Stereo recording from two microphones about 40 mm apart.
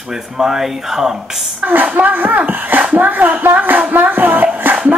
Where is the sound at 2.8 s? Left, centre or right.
Right.